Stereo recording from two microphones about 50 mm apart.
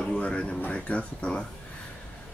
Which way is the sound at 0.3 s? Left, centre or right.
Left.